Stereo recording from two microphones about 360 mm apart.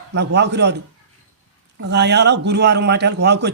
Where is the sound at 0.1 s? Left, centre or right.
Right.